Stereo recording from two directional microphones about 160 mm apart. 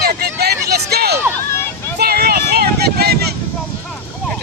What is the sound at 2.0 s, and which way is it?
Vehicle, 75° right (ahead or behind).